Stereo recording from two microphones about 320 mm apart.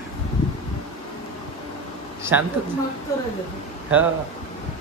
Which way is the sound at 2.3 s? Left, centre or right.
Centre.